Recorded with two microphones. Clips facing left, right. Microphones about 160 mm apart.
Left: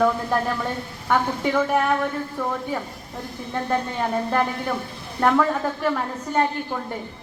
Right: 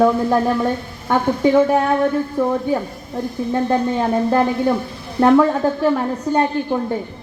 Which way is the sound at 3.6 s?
30° right (ahead or behind).